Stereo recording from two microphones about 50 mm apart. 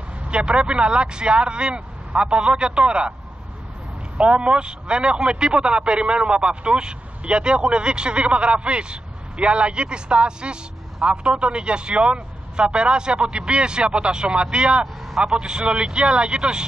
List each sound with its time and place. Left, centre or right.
0.3 s a man's voice: right
4.2 s a man's voice: right